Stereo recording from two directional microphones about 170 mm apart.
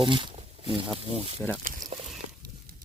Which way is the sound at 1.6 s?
50° right (ahead or behind).